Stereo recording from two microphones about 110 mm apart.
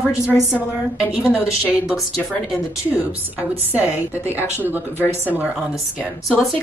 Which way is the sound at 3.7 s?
15° right (ahead or behind).